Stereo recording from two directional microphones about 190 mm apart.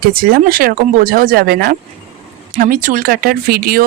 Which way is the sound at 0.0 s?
50° right (ahead or behind).